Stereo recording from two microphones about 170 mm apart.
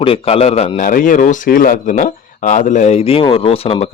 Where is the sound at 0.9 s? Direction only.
50° left (ahead or behind).